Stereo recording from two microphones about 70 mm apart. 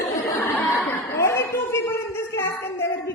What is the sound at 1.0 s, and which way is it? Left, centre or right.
A woman's voice, left.